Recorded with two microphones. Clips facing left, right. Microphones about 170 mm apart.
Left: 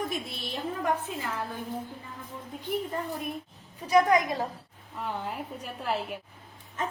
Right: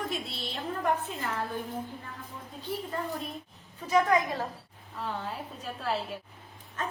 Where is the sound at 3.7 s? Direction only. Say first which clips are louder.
Left 3 dB; 15° left (ahead or behind).